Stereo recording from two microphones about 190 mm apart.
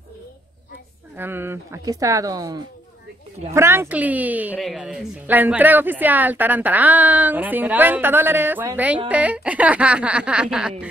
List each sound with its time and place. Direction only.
1.1 s a woman's voice: 10° right (ahead or behind)